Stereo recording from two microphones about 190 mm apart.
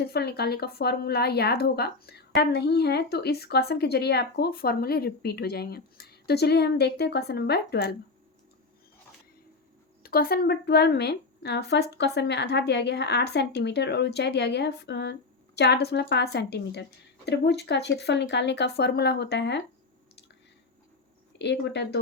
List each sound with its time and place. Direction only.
0.0 s speech: 55° left (ahead or behind)
10.0 s speech: 50° left (ahead or behind)
21.3 s speech: 65° left (ahead or behind)